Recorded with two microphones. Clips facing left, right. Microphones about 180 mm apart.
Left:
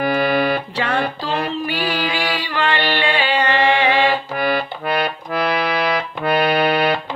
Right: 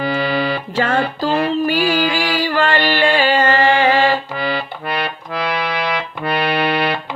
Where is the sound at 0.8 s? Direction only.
45° right (ahead or behind).